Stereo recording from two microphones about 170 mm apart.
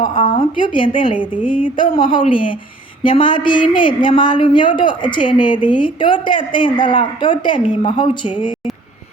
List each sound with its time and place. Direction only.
0.0 s speech: 30° left (ahead or behind)
1.4 s speech: 10° right (ahead or behind)
1.6 s speech: 30° left (ahead or behind)